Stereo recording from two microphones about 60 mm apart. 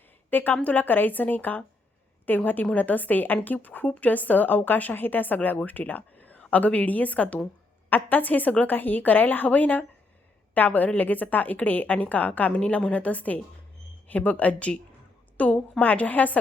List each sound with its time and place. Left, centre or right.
0.3 s a woman's voice: left